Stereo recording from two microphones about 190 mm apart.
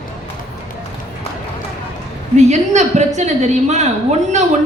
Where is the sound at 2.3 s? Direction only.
35° right (ahead or behind).